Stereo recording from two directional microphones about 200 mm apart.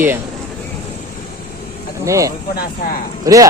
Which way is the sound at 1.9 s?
15° right (ahead or behind).